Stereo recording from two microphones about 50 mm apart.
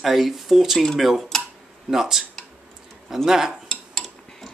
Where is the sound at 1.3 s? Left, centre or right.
Centre.